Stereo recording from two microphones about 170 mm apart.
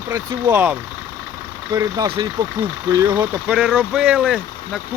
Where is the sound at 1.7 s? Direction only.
25° right (ahead or behind).